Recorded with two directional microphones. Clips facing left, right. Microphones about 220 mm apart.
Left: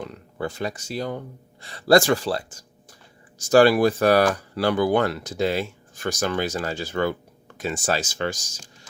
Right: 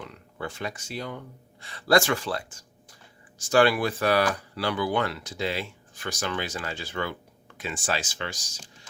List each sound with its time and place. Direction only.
0.0 s speech: 40° left (ahead or behind)